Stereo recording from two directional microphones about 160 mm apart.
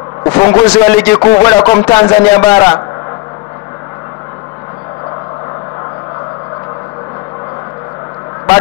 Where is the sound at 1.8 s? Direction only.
15° left (ahead or behind).